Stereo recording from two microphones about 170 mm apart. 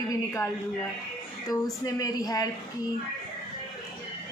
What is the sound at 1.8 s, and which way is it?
Speech, 20° left (ahead or behind).